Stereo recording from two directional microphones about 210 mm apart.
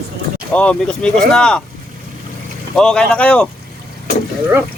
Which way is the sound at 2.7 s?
5° left (ahead or behind).